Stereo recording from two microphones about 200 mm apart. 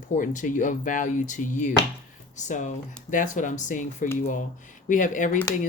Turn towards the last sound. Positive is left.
turn(degrees=40)  # may be behind; listen again after turning